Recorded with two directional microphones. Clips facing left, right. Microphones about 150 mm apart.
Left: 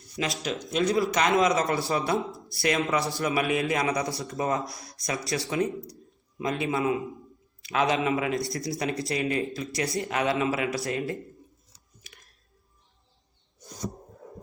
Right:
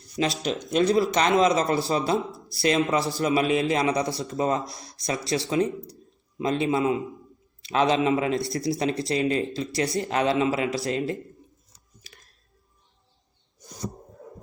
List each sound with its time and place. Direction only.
0.4 s a man's voice: 35° right (ahead or behind)
12.0 s clicking: 35° right (ahead or behind)